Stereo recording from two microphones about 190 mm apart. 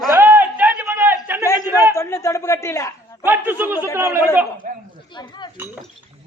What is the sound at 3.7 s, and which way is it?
Speech, 15° left (ahead or behind).